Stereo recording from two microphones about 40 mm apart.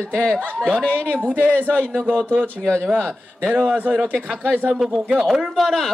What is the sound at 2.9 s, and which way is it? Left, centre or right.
Speech, right.